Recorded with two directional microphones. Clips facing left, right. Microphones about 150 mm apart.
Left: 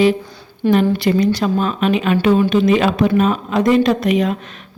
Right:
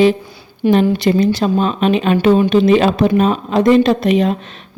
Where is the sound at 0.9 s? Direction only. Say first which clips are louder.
Right 2 dB; 25° right (ahead or behind).